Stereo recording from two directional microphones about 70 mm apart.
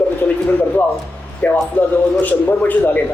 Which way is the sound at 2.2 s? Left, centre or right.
Left.